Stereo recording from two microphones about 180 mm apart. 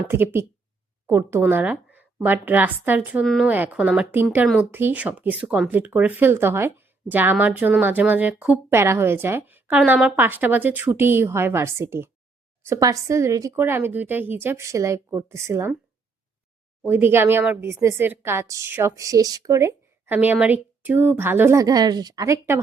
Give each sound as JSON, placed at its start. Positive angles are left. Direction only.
{"t": 0.1, "sound": "speech", "side_deg": -10}
{"t": 16.8, "sound": "speech", "side_deg": -10}